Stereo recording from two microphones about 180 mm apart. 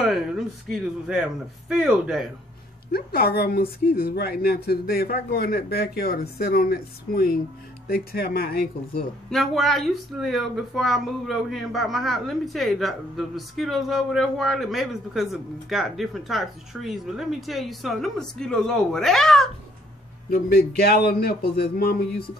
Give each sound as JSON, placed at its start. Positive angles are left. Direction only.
{"t": 0.0, "sound": "speech", "side_deg": 0}
{"t": 2.9, "sound": "speech", "side_deg": 55}
{"t": 9.3, "sound": "speech", "side_deg": 0}
{"t": 20.2, "sound": "speech", "side_deg": 60}